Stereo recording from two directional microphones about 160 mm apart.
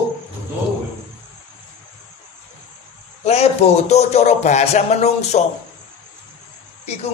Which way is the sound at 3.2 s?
40° left (ahead or behind).